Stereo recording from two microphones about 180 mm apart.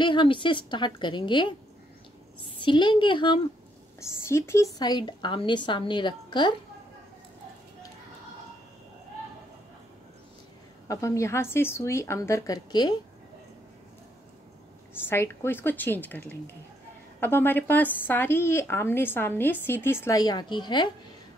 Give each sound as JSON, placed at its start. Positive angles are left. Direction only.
{"t": 0.0, "sound": "a woman's voice", "side_deg": 25}
{"t": 2.6, "sound": "a woman's voice", "side_deg": 25}
{"t": 4.0, "sound": "a woman's voice", "side_deg": 15}
{"t": 10.9, "sound": "a woman's voice", "side_deg": 15}
{"t": 15.0, "sound": "a woman's voice", "side_deg": 15}